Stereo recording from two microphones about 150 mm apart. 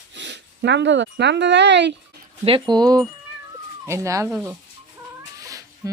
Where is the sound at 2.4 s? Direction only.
35° right (ahead or behind).